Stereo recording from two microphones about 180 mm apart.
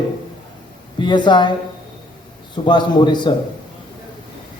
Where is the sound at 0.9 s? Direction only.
25° left (ahead or behind).